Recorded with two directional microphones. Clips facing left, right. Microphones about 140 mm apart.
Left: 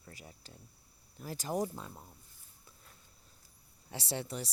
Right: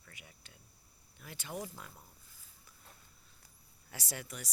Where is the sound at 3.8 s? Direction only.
25° left (ahead or behind).